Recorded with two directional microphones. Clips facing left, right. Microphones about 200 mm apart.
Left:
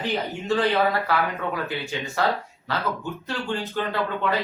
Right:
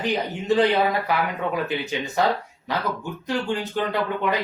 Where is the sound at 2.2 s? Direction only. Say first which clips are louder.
Right 2 dB; 15° right (ahead or behind).